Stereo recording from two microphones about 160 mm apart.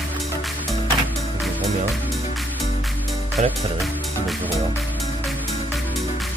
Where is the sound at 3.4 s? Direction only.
45° right (ahead or behind).